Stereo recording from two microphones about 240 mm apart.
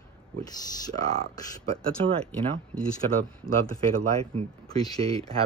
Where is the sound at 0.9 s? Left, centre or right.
Right.